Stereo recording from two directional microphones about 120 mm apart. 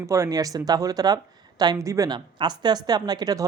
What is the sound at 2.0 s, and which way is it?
Speech, 40° right (ahead or behind).